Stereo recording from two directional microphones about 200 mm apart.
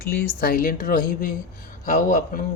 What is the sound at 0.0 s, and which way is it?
Speech, 50° left (ahead or behind).